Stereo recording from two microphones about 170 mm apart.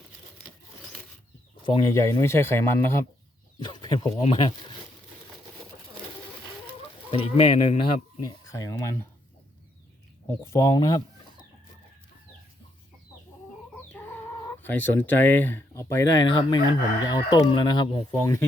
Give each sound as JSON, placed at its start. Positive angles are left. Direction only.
{"t": 1.6, "sound": "speech", "side_deg": 25}
{"t": 3.6, "sound": "speech", "side_deg": 25}
{"t": 7.1, "sound": "speech", "side_deg": 35}
{"t": 10.2, "sound": "speech", "side_deg": 15}
{"t": 14.6, "sound": "speech", "side_deg": 10}
{"t": 16.3, "sound": "speech", "side_deg": 25}
{"t": 18.1, "sound": "speech", "side_deg": 15}